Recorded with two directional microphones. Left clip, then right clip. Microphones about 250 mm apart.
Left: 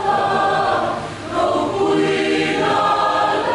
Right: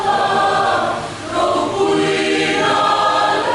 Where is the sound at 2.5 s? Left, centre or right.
Centre.